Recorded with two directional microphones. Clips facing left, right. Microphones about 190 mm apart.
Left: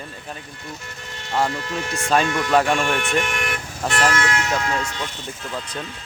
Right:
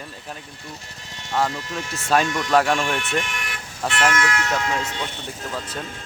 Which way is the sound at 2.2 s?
55° left (ahead or behind).